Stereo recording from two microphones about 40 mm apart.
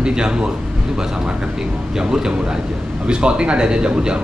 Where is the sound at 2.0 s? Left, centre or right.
Centre.